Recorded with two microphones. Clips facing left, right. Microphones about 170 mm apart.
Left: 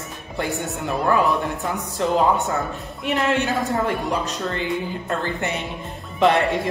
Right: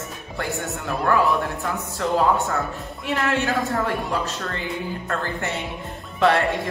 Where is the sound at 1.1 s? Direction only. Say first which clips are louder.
Even; 20° left (ahead or behind).